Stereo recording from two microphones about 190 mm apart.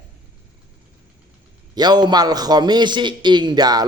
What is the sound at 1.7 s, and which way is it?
A man's voice, 20° right (ahead or behind).